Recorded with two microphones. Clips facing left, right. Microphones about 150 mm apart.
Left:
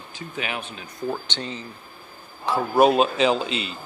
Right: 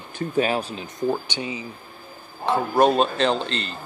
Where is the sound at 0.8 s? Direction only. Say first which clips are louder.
Right 4 dB; 15° right (ahead or behind).